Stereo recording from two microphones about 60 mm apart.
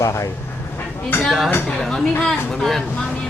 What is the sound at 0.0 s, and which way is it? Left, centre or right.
Speech, left.